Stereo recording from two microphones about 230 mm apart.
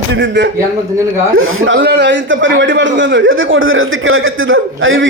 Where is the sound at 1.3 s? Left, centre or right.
Right.